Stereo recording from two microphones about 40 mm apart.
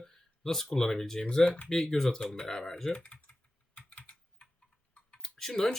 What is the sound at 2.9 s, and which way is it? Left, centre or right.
Typing, left.